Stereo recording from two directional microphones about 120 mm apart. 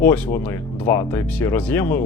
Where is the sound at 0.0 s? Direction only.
15° left (ahead or behind).